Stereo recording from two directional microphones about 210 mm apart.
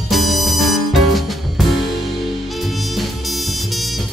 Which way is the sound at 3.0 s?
Centre (ahead or behind).